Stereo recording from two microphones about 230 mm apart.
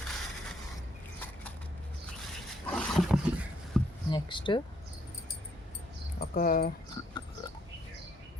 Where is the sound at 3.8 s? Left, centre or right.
Centre.